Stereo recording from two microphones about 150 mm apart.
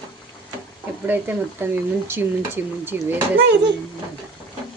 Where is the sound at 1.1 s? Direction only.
10° right (ahead or behind).